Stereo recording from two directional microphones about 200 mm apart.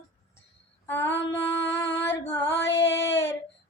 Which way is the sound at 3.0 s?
65° left (ahead or behind).